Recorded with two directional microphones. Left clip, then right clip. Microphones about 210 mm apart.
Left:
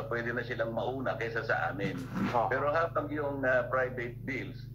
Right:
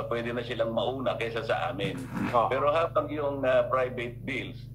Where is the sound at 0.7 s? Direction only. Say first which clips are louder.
Right 5 dB; 25° right (ahead or behind).